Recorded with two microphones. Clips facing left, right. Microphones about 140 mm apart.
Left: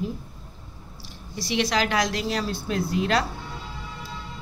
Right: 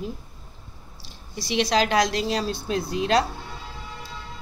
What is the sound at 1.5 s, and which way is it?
A woman's voice, 25° right (ahead or behind).